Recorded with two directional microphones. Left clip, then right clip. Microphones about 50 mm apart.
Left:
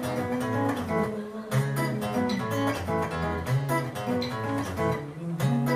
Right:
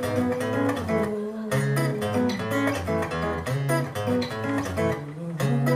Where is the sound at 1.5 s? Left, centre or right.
Right.